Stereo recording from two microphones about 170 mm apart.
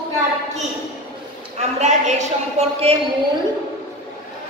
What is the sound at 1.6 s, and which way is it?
A woman's voice, 45° right (ahead or behind).